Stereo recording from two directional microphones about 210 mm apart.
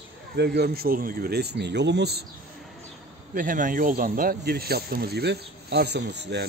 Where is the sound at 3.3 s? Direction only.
40° right (ahead or behind).